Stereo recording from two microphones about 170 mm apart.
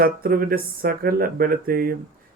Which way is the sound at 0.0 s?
60° right (ahead or behind).